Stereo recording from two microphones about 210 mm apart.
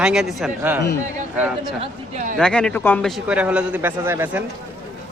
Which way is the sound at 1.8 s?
35° right (ahead or behind).